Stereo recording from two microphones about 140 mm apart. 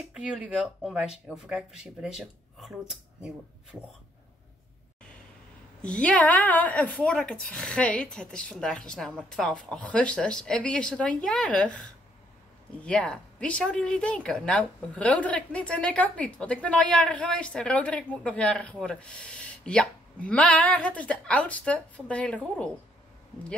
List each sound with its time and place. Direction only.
0.0 s speech: 5° right (ahead or behind)
5.8 s speech: 5° left (ahead or behind)